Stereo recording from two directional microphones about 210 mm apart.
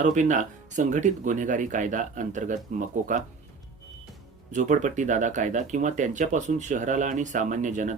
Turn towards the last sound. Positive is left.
turn(degrees=-35)  # may be behind; listen again after turning